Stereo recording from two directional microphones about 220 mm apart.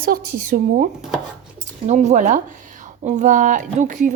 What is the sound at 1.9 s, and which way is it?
Speech, 30° right (ahead or behind).